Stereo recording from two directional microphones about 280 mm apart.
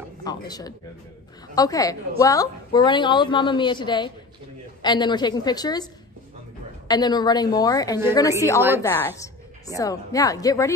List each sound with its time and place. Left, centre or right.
0.2 s a sound: centre
1.5 s a woman's voice: centre
6.9 s a woman's voice: centre
8.5 s a woman's voice: centre
8.8 s a woman's voice: centre